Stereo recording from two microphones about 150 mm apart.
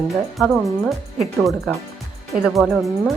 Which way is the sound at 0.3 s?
Centre (ahead or behind).